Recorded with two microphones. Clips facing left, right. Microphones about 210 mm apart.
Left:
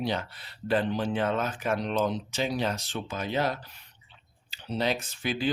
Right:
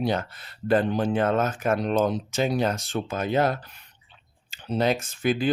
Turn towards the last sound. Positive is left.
turn(degrees=-50)  # may be behind; listen again after turning